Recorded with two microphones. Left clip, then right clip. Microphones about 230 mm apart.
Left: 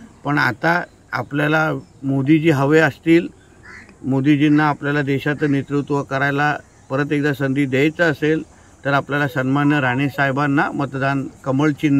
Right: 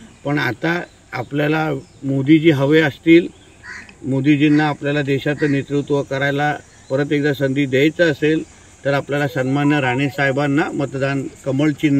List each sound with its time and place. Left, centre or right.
0.2 s speech: left
4.1 s speech: left